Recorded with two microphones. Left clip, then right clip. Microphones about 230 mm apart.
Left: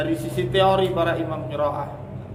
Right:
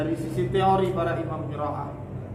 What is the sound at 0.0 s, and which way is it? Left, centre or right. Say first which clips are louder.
A man's voice: left 3 dB; left.